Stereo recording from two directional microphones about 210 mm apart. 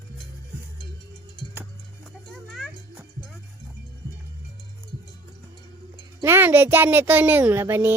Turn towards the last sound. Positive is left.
turn(degrees=-10)  # may be behind; listen again after turning